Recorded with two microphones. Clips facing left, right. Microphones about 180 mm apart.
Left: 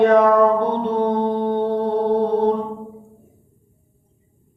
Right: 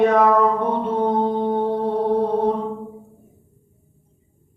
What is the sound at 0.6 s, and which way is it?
Mantra, 30° left (ahead or behind).